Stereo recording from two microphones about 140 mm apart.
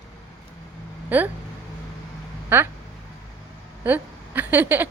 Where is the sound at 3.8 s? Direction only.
15° right (ahead or behind).